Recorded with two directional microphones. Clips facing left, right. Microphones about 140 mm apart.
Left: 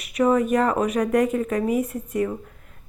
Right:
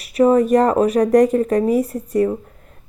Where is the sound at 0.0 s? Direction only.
30° right (ahead or behind).